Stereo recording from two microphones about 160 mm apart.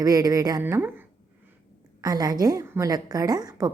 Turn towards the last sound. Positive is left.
turn(degrees=-25)  # may be behind; listen again after turning